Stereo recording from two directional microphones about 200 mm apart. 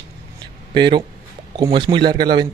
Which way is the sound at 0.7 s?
25° right (ahead or behind).